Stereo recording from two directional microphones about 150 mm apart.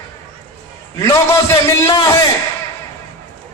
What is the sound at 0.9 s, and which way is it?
A man's voice, 20° left (ahead or behind).